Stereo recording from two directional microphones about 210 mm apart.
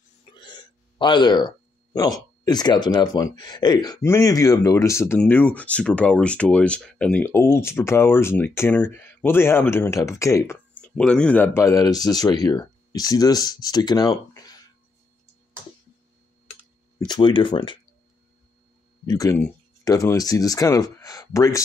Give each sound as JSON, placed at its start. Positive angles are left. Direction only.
{"t": 0.2, "sound": "hiccup", "side_deg": 20}
{"t": 0.9, "sound": "speech", "side_deg": 20}
{"t": 17.1, "sound": "speech", "side_deg": 25}
{"t": 19.0, "sound": "speech", "side_deg": 15}